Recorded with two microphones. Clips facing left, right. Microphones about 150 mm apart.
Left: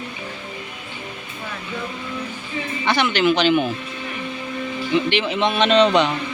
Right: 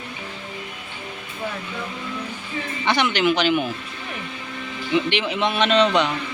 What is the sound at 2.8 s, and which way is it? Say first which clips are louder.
Speech: left 1 dB; 20° right (ahead or behind).